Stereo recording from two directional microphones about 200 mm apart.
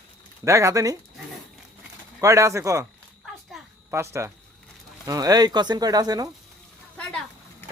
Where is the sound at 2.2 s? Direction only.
15° right (ahead or behind).